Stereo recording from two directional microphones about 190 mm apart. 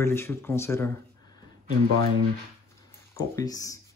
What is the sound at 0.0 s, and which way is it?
Speech, 10° left (ahead or behind).